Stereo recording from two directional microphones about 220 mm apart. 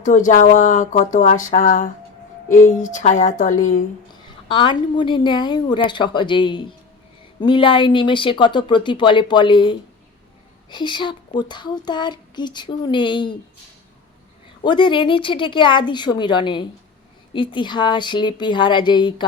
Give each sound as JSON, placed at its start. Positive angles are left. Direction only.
{"t": 0.0, "sound": "speech", "side_deg": 35}
{"t": 4.4, "sound": "a woman's voice", "side_deg": 20}
{"t": 14.6, "sound": "a woman's voice", "side_deg": 20}